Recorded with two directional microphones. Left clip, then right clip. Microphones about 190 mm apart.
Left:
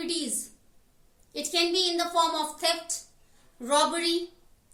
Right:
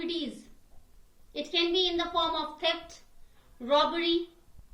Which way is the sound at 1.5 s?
25° left (ahead or behind).